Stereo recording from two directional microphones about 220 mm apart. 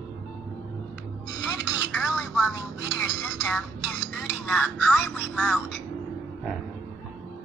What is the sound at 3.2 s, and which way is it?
Music, 10° left (ahead or behind).